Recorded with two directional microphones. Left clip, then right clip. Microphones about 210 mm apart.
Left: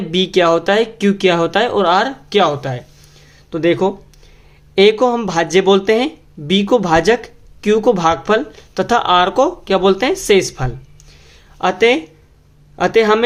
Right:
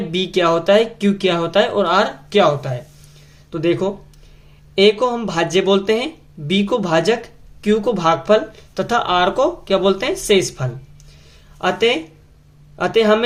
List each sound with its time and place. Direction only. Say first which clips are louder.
0.1 s speech: left 4 dB; 35° left (ahead or behind)